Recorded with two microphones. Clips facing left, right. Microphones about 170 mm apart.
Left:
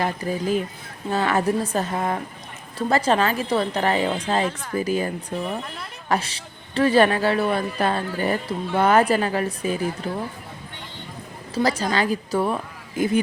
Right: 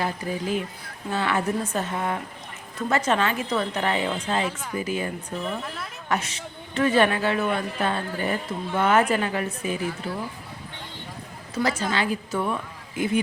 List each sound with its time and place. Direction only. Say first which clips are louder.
0.0 s a woman's voice: left 3 dB; 40° left (ahead or behind)
6.1 s a woman's voice: left 3 dB; 35° left (ahead or behind)
11.5 s a woman's voice: left 3 dB; 35° left (ahead or behind)